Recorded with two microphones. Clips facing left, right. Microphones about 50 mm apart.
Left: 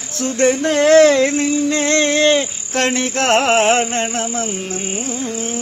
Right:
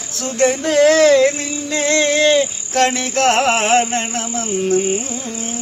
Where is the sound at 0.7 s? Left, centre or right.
Left.